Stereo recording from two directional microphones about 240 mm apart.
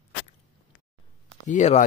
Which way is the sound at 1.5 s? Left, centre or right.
Left.